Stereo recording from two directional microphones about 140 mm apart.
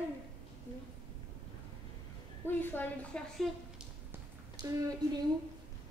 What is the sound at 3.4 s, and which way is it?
Speech, centre (ahead or behind).